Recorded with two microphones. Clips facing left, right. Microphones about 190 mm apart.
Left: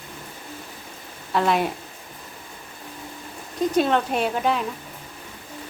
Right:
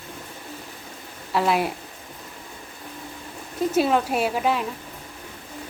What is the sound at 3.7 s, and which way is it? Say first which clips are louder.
Speech: even; 5° right (ahead or behind).